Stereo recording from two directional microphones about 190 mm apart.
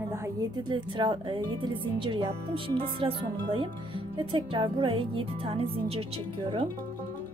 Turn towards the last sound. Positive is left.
turn(degrees=-30)  # may be behind; listen again after turning